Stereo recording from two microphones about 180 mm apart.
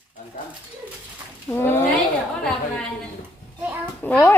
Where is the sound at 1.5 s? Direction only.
10° left (ahead or behind).